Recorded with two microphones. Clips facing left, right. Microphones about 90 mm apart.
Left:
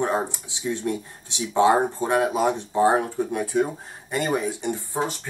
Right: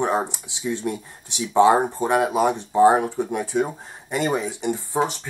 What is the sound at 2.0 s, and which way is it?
Speech, 15° right (ahead or behind).